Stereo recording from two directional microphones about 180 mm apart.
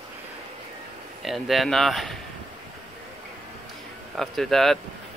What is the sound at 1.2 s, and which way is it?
Speech, centre (ahead or behind).